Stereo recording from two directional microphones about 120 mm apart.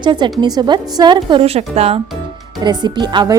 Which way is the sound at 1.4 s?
60° right (ahead or behind).